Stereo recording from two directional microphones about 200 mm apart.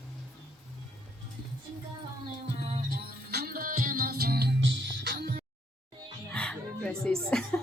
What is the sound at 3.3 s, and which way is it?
Music, 50° right (ahead or behind).